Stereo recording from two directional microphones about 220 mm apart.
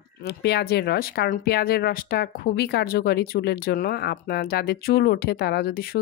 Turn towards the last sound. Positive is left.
turn(degrees=40)  # may be behind; listen again after turning